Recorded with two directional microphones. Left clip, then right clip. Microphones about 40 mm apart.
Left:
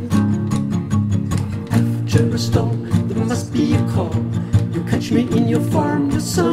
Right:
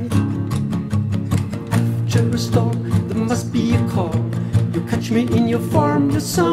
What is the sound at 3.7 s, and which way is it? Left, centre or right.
Music, right.